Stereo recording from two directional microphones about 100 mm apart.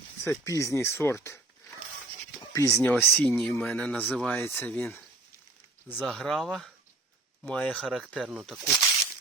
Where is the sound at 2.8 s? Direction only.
20° left (ahead or behind).